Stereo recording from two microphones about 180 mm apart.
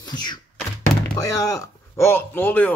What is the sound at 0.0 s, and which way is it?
Thunk, 25° left (ahead or behind).